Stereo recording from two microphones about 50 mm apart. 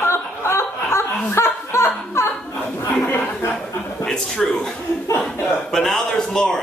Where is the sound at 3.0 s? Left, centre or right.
Left.